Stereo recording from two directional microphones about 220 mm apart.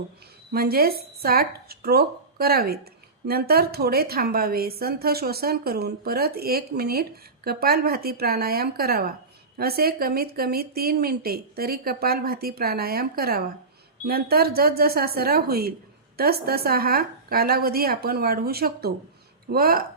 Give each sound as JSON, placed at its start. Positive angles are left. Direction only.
{"t": 0.5, "sound": "a woman's voice", "side_deg": -45}